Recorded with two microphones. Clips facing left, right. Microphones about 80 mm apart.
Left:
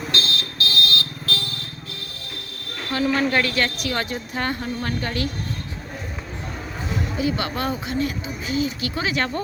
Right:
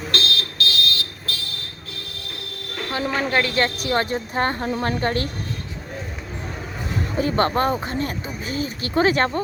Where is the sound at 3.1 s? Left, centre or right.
Centre; by 5.2 s right.